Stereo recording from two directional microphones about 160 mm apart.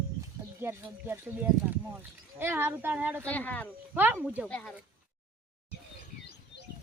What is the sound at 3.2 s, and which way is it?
Speech, 10° left (ahead or behind).